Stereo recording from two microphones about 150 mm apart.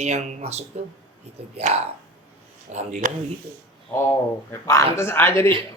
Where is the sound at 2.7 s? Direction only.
55° right (ahead or behind).